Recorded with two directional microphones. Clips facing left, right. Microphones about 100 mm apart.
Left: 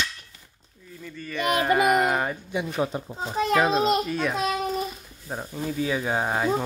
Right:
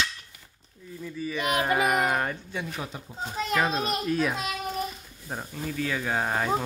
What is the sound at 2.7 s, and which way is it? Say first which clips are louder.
Speech: left 10 dB; 35° left (ahead or behind).